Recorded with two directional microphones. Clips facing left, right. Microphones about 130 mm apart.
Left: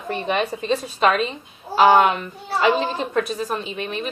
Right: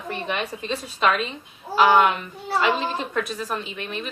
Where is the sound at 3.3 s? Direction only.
30° left (ahead or behind).